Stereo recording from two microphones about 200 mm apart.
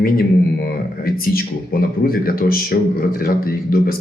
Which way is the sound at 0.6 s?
50° left (ahead or behind).